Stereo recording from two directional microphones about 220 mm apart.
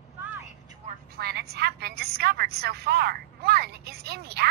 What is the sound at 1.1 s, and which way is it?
A woman's voice, 45° right (ahead or behind).